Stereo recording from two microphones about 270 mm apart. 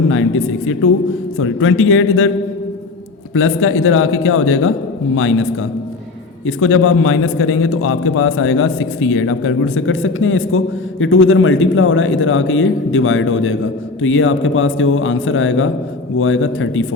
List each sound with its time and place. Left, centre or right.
0.1 s a man's voice: left
3.3 s a man's voice: left